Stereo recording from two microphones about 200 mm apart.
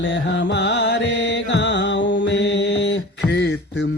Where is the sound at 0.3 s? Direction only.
60° left (ahead or behind).